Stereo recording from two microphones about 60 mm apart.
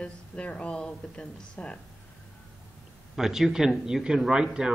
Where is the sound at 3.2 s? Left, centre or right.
Centre.